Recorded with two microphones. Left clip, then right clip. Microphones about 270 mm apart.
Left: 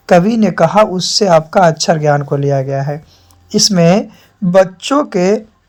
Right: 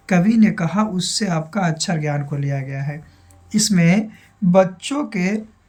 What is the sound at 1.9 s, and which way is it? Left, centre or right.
Speech, left.